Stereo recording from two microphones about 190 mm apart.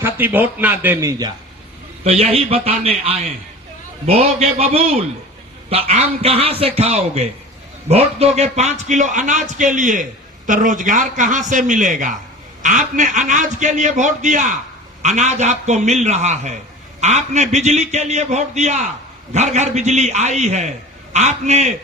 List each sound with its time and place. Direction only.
0.0 s speech: 10° right (ahead or behind)
2.0 s a man's voice: 30° right (ahead or behind)